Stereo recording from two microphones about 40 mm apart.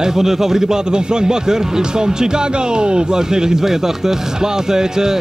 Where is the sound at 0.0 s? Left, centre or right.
Centre.